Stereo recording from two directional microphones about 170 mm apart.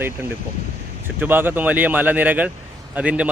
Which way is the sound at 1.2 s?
10° right (ahead or behind).